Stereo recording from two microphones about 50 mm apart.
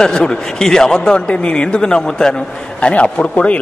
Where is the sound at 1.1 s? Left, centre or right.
Left.